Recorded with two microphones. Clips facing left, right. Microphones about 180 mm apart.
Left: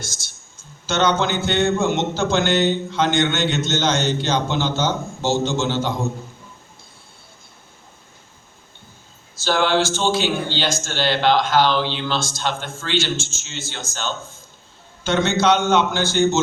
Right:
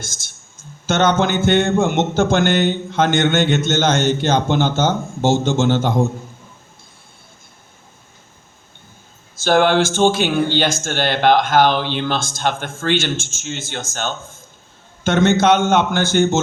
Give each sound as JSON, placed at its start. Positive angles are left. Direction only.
{"t": 0.0, "sound": "a man's voice", "side_deg": -50}
{"t": 9.3, "sound": "a man's voice", "side_deg": -50}